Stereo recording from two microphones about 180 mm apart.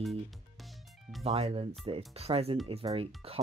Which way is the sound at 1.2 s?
35° right (ahead or behind).